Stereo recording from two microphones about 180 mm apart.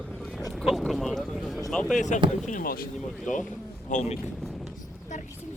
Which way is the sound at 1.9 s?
45° left (ahead or behind).